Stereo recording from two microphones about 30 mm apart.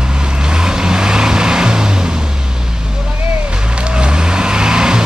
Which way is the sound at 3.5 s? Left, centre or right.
Right.